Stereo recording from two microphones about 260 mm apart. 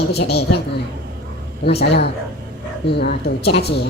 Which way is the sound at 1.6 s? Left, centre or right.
Left.